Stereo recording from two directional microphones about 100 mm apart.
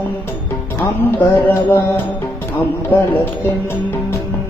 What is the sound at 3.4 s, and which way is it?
Music, 20° left (ahead or behind).